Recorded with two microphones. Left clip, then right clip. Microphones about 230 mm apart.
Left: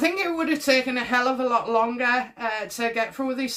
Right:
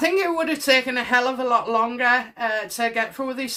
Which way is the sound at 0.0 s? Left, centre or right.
Right.